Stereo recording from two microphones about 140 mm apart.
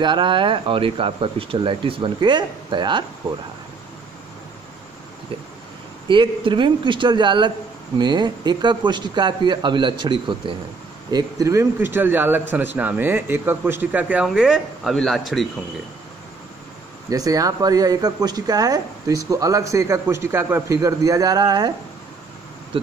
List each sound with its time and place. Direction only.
0.0 s speech: 35° right (ahead or behind)
6.0 s a man's voice: 35° right (ahead or behind); by 15.4 s centre (ahead or behind)
17.1 s speech: 25° right (ahead or behind)